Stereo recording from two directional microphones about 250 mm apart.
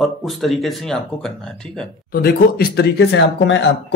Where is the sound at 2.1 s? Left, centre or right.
Left.